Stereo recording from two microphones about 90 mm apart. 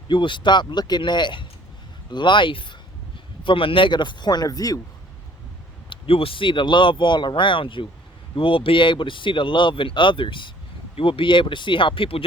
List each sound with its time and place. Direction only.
0.1 s speech: 65° left (ahead or behind); by 4.8 s 45° left (ahead or behind)
5.9 s speech: 90° left; by 7.9 s 70° left (ahead or behind)
8.4 s speech: 85° left